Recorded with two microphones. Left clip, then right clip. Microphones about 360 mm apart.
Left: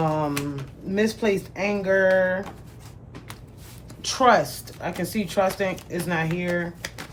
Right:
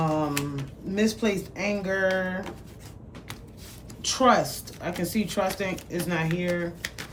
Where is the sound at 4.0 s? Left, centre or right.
Centre.